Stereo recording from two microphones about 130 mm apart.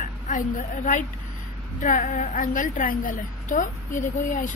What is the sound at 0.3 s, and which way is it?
A woman's voice, 80° left.